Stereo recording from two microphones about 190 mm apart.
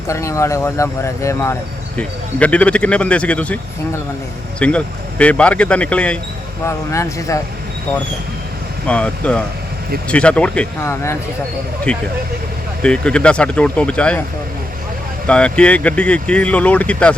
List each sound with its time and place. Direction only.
0.1 s speech: 15° left (ahead or behind)
8.9 s speech: 5° left (ahead or behind)
15.3 s speech: 5° left (ahead or behind)